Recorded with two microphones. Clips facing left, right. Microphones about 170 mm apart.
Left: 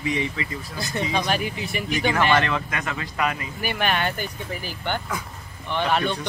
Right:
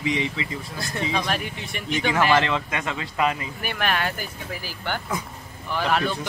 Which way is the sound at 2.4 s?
20° right (ahead or behind).